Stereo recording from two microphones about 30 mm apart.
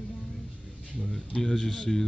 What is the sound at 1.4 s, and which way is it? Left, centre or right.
Speech, centre.